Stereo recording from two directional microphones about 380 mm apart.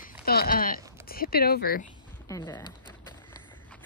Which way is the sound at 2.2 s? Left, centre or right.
Centre.